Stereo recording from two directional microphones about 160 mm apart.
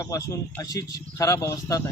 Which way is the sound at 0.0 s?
20° left (ahead or behind).